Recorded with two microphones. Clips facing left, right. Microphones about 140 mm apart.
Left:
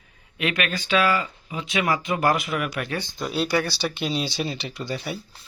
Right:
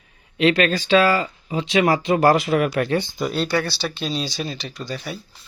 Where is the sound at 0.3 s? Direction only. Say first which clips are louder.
Right 9 dB; 30° right (ahead or behind).